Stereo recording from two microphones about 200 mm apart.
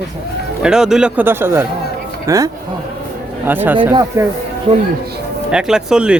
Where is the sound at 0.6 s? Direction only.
5° right (ahead or behind).